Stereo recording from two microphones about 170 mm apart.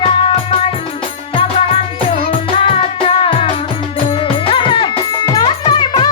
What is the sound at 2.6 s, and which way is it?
Music, 30° left (ahead or behind).